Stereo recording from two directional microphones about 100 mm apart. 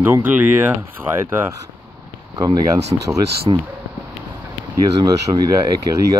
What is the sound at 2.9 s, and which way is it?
Speech, 45° right (ahead or behind).